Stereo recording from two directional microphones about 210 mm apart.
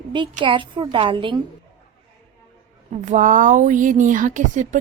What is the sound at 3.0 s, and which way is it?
A woman's voice, 35° right (ahead or behind).